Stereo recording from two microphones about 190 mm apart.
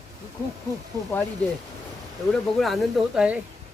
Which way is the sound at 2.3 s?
Centre (ahead or behind).